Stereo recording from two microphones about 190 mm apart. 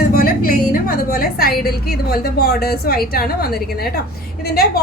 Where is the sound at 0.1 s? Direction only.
50° left (ahead or behind).